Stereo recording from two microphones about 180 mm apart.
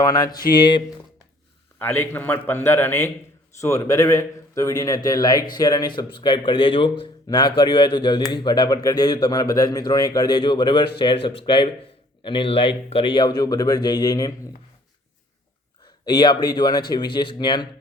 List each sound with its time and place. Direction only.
0.0 s speech: 20° left (ahead or behind)
1.8 s a man's voice: 10° left (ahead or behind)
16.0 s speech: 25° left (ahead or behind)